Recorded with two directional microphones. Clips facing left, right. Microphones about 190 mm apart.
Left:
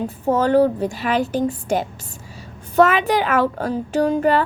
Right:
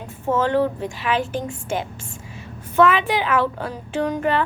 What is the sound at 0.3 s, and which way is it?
A woman's voice, 40° left (ahead or behind).